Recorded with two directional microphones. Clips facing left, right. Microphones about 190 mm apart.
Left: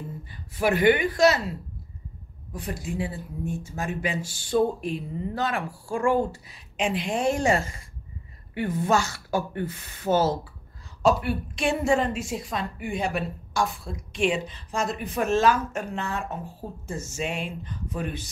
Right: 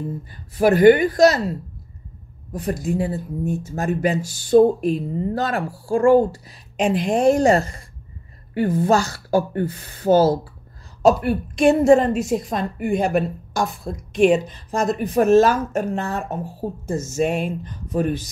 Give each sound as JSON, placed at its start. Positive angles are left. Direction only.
{"t": 0.3, "sound": "a woman's voice", "side_deg": -40}